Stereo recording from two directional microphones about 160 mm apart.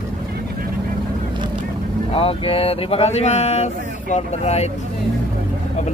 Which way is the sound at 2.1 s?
35° left (ahead or behind).